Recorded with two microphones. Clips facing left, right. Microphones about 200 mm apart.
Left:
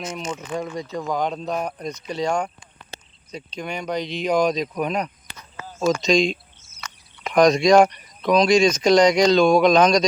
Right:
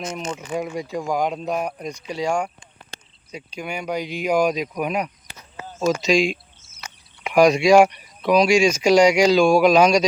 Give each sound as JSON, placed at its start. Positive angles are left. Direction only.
{"t": 0.0, "sound": "speech", "side_deg": 5}
{"t": 0.3, "sound": "speech", "side_deg": -10}
{"t": 5.5, "sound": "a sound", "side_deg": -25}
{"t": 6.0, "sound": "speech", "side_deg": -5}